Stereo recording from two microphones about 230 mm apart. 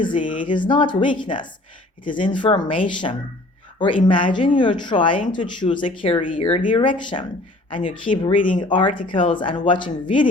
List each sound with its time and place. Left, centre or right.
0.0 s a woman's voice: left
8.4 s speech: left
8.6 s a woman's voice: left